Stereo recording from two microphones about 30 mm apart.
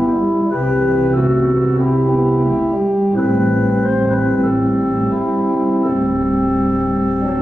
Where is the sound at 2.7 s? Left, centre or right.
Centre.